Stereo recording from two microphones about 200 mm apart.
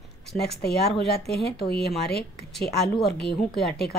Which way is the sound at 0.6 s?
55° left (ahead or behind).